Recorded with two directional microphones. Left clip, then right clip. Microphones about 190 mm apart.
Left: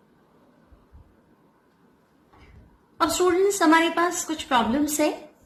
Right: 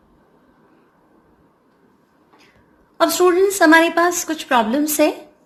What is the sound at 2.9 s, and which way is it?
A woman's voice, 40° right (ahead or behind).